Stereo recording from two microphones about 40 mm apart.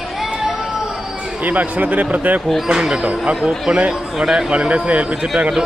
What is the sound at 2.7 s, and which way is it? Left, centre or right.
Speech, centre.